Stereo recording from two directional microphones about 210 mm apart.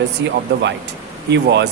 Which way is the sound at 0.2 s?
60° right (ahead or behind).